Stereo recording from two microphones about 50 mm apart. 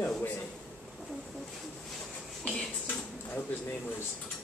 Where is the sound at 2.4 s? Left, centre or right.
Left.